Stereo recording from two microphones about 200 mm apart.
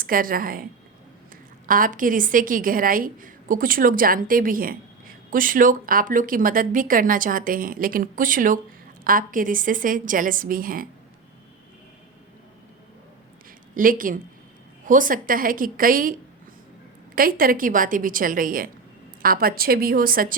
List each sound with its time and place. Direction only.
0.0 s a woman's voice: 45° right (ahead or behind)
13.7 s a woman's voice: 45° right (ahead or behind)
17.2 s a woman's voice: 45° right (ahead or behind)